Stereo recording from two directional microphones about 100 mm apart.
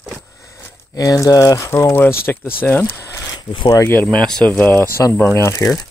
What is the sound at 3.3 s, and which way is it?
Speech, 50° left (ahead or behind).